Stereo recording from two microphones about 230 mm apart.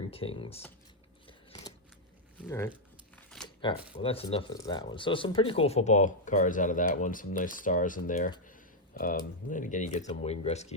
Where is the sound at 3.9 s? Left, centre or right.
Left.